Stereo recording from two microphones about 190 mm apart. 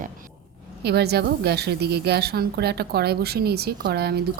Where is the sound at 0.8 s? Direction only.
60° right (ahead or behind).